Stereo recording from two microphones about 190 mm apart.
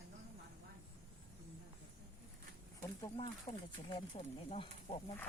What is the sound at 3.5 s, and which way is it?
Speech, 35° left (ahead or behind).